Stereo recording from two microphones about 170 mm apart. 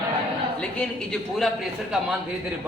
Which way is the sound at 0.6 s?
5° left (ahead or behind).